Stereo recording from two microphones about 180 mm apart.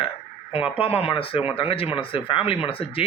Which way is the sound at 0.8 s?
30° left (ahead or behind).